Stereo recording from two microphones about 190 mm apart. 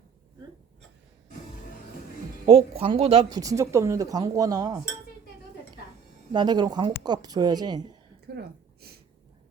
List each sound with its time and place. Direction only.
2.5 s speech: 30° right (ahead or behind)
6.3 s speech: 25° right (ahead or behind)
8.3 s speech: 55° right (ahead or behind)